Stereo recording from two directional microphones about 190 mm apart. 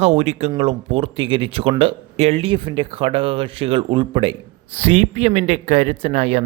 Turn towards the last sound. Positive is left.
turn(degrees=-35)  # may be behind; listen again after turning